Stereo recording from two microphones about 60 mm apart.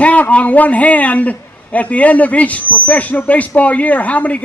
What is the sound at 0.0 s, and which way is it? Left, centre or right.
Speech, left.